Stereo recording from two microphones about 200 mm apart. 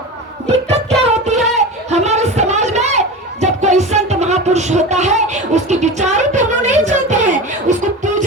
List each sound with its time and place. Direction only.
0.4 s music: 30° right (ahead or behind)
1.5 s a sound: 35° right (ahead or behind)
3.4 s music: 35° right (ahead or behind)